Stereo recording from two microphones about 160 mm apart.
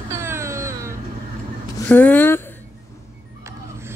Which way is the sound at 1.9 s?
10° left (ahead or behind).